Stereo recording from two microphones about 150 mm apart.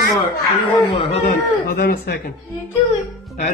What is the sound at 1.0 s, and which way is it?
Speech, 45° left (ahead or behind).